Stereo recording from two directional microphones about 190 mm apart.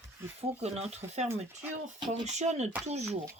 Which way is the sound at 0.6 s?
35° right (ahead or behind).